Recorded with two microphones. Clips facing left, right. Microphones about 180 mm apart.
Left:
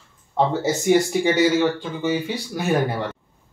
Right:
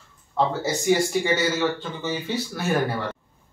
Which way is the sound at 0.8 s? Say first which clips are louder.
Left 3 dB; 15° left (ahead or behind).